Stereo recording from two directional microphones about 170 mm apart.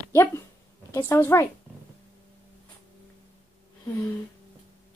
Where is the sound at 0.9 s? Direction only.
15° left (ahead or behind).